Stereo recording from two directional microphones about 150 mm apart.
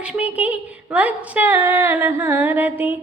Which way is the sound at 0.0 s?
10° right (ahead or behind).